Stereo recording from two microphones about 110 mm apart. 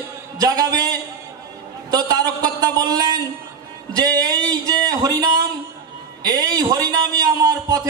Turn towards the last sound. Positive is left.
turn(degrees=-30)  # may be behind; listen again after turning